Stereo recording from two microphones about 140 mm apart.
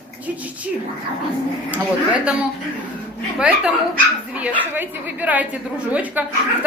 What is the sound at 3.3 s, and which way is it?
A woman's voice, 5° right (ahead or behind).